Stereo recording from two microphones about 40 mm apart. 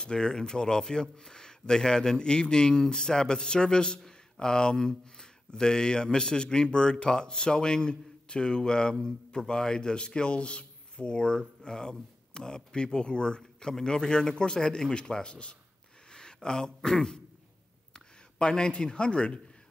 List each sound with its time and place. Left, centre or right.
0.0 s a man's voice: left